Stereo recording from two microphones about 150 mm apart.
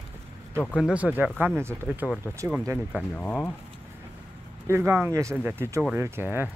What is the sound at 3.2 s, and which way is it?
Speech, 10° left (ahead or behind).